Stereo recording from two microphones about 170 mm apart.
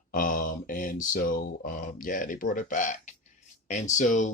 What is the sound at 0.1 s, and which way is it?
Speech, 55° left (ahead or behind).